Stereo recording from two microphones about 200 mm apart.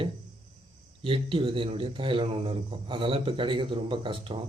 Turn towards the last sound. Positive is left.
turn(degrees=-25)  # may be behind; listen again after turning